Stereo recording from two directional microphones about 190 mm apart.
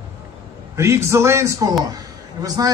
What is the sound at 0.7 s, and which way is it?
A man's voice, 15° right (ahead or behind).